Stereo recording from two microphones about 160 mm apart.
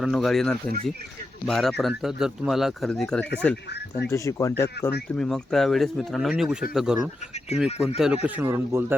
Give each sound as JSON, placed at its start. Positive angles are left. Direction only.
{"t": 0.0, "sound": "speech", "side_deg": 0}
{"t": 4.1, "sound": "speech", "side_deg": 20}
{"t": 5.0, "sound": "speech", "side_deg": 5}